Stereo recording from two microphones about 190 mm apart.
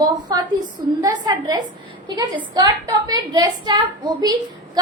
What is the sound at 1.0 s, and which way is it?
A woman's voice, 20° right (ahead or behind).